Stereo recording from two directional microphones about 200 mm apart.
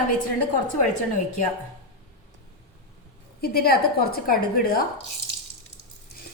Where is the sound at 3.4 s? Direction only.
50° left (ahead or behind).